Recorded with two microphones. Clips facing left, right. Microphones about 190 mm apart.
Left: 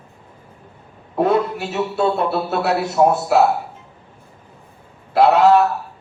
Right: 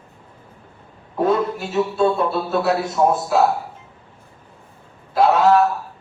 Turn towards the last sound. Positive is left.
turn(degrees=65)  # may be behind; listen again after turning